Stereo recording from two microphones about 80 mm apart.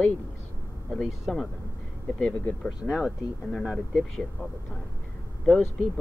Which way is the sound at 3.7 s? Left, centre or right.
Centre.